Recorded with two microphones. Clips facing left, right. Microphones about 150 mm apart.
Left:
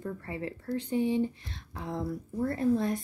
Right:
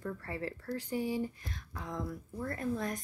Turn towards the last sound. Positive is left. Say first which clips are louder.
# left 8 dB
turn(degrees=30)  # may be behind; listen again after turning